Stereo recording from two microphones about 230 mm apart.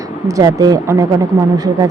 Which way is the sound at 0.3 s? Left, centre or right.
Centre.